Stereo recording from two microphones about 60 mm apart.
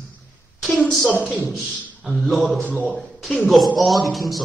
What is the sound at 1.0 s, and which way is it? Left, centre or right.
Speech, right.